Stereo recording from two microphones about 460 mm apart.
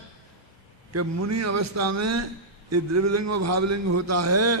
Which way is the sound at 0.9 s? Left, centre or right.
Right.